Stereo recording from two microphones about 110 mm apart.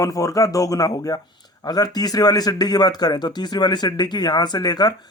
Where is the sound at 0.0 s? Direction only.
30° left (ahead or behind).